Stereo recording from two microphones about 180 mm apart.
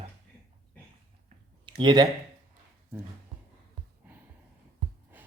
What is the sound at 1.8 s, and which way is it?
Speech, 25° right (ahead or behind).